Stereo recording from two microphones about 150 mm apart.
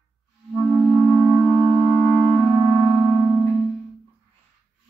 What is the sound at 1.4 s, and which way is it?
Music, centre (ahead or behind).